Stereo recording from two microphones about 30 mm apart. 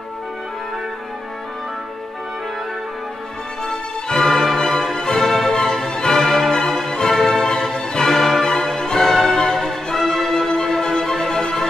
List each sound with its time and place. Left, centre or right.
3.6 s music: centre
5.5 s music: left
8.5 s music: left
9.0 s music: centre
10.5 s music: left